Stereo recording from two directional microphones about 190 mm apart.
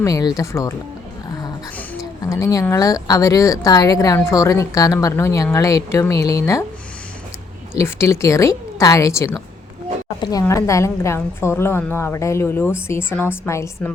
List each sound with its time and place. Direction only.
0.0 s a woman's voice: 20° left (ahead or behind)
2.0 s a woman's voice: 15° left (ahead or behind)
7.8 s a woman's voice: 15° left (ahead or behind)